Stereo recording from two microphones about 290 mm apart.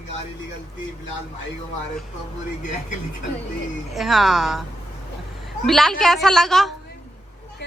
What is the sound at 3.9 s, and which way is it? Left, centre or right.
Speech, centre.